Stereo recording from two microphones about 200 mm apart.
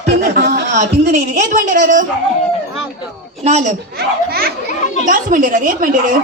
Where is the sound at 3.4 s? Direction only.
35° right (ahead or behind).